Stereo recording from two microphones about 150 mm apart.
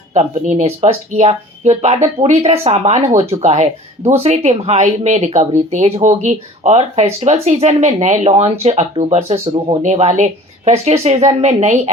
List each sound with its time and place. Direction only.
0.1 s speech: 50° right (ahead or behind)